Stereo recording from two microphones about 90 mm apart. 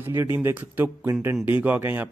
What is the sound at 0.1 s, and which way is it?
Speech, 30° right (ahead or behind).